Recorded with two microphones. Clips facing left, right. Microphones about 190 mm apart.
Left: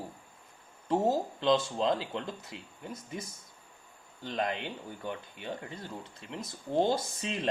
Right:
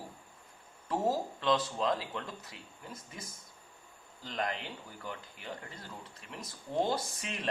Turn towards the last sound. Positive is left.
turn(degrees=25)  # may be behind; listen again after turning